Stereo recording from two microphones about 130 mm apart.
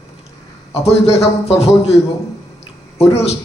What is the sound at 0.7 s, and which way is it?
A man's voice, 55° left (ahead or behind).